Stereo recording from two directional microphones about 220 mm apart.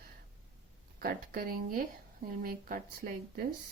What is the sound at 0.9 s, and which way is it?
Speech, 40° right (ahead or behind).